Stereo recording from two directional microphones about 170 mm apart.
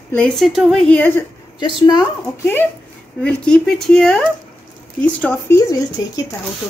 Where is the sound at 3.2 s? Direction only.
5° left (ahead or behind).